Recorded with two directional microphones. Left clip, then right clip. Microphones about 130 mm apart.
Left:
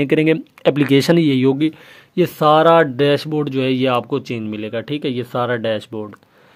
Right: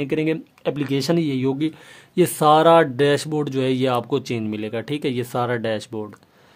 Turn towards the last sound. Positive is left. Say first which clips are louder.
# left 4 dB
turn(degrees=10)  # may be behind; listen again after turning